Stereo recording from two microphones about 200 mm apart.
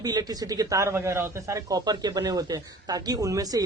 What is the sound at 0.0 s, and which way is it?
Speech, 20° right (ahead or behind).